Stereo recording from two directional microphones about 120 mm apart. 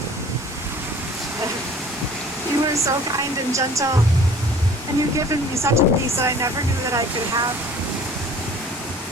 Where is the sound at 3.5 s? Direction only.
25° right (ahead or behind).